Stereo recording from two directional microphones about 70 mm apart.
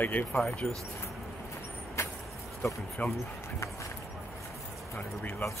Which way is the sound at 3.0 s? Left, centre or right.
Left.